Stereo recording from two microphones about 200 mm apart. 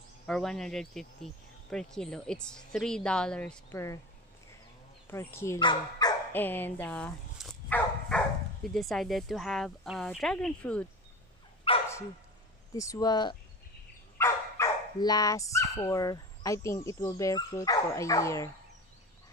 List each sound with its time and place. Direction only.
0.3 s speech: centre (ahead or behind)
5.0 s speech: 10° left (ahead or behind)
6.3 s dog: 10° left (ahead or behind)
8.6 s speech: centre (ahead or behind)
11.7 s dog: 25° left (ahead or behind)
12.7 s speech: 15° left (ahead or behind)